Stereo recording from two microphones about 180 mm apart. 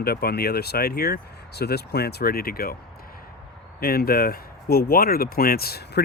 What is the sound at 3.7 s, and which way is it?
Speech, 60° left (ahead or behind).